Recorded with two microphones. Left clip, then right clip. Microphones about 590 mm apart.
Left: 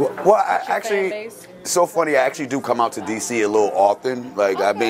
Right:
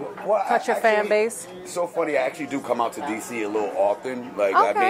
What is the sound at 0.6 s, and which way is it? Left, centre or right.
Speech, right.